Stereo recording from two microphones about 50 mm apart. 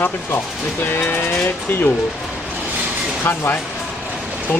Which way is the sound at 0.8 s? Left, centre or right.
Left.